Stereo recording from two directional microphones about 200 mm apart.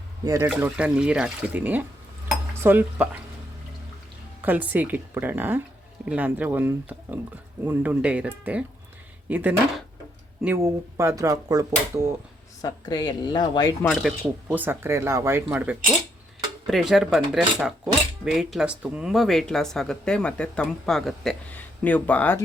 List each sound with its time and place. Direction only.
0.3 s speech: 10° right (ahead or behind)
2.3 s cutlery: 10° right (ahead or behind)
4.4 s speech: 10° right (ahead or behind)
12.6 s a woman's voice: 20° left (ahead or behind)
13.8 s speech: centre (ahead or behind)
14.4 s speech: 10° right (ahead or behind); by 22.4 s 10° left (ahead or behind)